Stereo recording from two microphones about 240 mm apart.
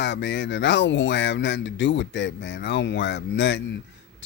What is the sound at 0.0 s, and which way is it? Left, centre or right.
Speech, left.